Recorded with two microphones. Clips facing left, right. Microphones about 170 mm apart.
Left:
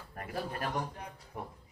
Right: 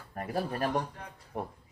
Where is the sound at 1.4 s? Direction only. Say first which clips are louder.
Right 6 dB; 35° right (ahead or behind).